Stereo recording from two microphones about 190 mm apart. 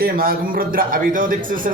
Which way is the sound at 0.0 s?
55° right (ahead or behind).